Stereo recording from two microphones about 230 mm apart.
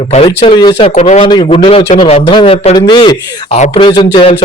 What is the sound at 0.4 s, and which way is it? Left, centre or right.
A man's voice, left.